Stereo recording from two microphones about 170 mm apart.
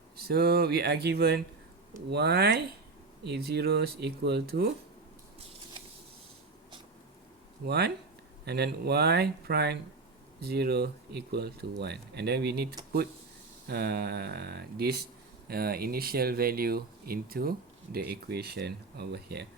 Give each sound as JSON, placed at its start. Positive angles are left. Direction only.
{"t": 0.2, "sound": "speech", "side_deg": -65}
{"t": 7.7, "sound": "speech", "side_deg": -75}
{"t": 13.7, "sound": "speech", "side_deg": -70}